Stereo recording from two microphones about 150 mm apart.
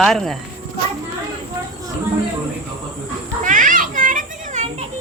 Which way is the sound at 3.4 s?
60° right (ahead or behind).